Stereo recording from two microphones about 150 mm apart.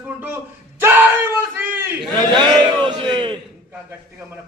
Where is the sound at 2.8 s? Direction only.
30° right (ahead or behind).